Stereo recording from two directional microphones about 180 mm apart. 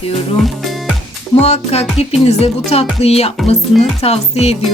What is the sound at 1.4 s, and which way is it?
Speech, 35° left (ahead or behind).